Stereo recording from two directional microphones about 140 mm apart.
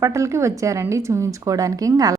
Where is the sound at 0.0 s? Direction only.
20° right (ahead or behind).